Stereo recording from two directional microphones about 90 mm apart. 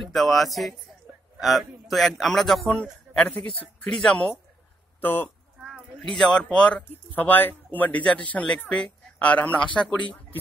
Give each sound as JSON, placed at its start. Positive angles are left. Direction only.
{"t": 0.0, "sound": "a man's voice", "side_deg": 0}
{"t": 3.2, "sound": "speech", "side_deg": 20}
{"t": 3.9, "sound": "speech", "side_deg": 5}
{"t": 5.0, "sound": "speech", "side_deg": 25}
{"t": 5.6, "sound": "a sound", "side_deg": -5}
{"t": 6.1, "sound": "speech", "side_deg": 5}
{"t": 7.2, "sound": "speech", "side_deg": 20}